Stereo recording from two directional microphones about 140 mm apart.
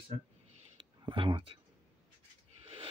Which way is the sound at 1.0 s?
35° right (ahead or behind).